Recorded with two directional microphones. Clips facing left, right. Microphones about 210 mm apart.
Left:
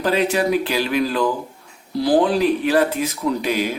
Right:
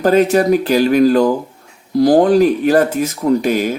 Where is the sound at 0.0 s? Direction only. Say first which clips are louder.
Right 7 dB; 45° right (ahead or behind).